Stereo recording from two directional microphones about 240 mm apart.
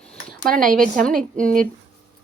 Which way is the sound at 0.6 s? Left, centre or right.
Right.